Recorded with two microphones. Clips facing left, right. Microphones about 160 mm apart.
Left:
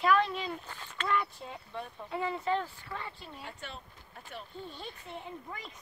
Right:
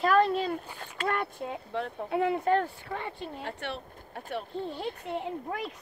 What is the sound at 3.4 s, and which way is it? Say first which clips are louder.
Speech: right 7 dB; 75° right (ahead or behind).